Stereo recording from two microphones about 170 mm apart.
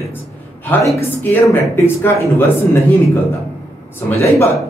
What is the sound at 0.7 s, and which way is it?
Speech, 10° left (ahead or behind).